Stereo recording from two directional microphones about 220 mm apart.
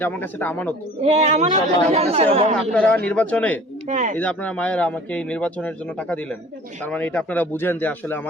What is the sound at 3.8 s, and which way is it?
Speech, 35° right (ahead or behind).